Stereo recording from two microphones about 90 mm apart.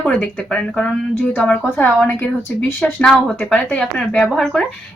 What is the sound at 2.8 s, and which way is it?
Speech, 10° left (ahead or behind).